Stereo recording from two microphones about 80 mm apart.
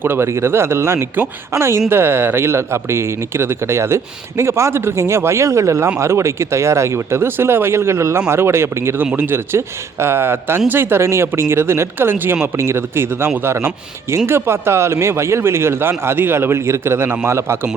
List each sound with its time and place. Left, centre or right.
0.0 s a man's voice: right